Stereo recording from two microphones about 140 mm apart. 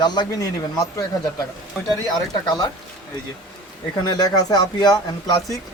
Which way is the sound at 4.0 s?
30° left (ahead or behind).